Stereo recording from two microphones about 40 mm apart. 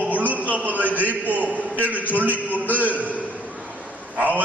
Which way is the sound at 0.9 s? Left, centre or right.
Right.